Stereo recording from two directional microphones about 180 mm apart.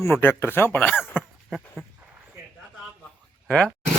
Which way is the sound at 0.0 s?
10° left (ahead or behind).